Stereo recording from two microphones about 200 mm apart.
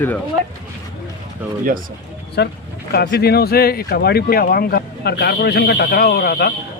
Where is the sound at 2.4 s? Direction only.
55° left (ahead or behind).